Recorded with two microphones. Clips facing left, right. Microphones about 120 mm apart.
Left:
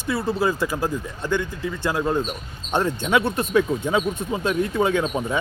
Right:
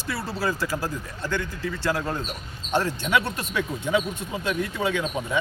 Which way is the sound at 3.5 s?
35° left (ahead or behind).